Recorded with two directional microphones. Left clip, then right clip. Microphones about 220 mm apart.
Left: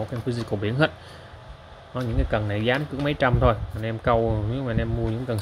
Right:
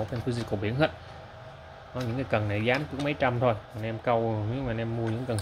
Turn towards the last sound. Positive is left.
turn(degrees=15)  # may be behind; listen again after turning